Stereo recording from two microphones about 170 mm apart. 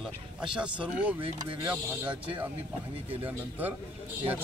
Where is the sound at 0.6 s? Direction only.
5° right (ahead or behind).